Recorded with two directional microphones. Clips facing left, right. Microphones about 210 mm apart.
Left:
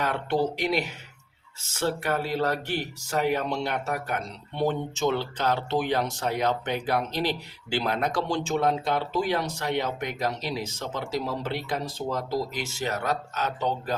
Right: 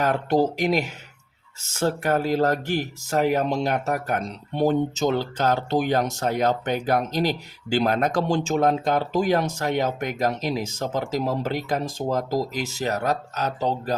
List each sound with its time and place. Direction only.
0.0 s speech: 40° right (ahead or behind)